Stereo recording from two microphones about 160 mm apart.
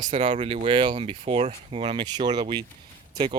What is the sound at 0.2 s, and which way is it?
Speech, 35° right (ahead or behind).